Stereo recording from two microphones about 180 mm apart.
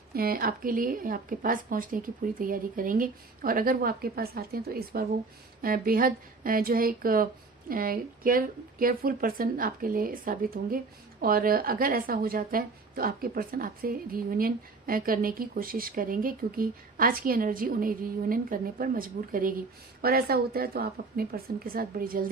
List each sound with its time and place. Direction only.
0.1 s a woman's voice: 55° right (ahead or behind)